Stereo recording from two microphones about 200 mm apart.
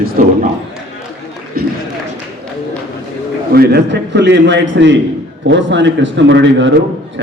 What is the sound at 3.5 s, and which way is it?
A man's voice, 55° right (ahead or behind).